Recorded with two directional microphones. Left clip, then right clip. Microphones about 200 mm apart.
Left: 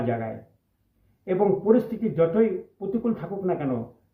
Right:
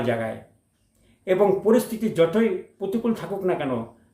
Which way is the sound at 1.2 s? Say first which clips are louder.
Right 2 dB; 5° right (ahead or behind).